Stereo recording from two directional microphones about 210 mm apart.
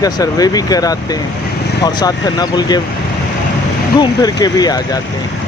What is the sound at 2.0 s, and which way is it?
Speech, 20° left (ahead or behind).